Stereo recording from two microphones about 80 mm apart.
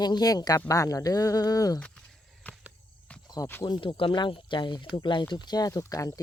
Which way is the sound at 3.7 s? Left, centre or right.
Left.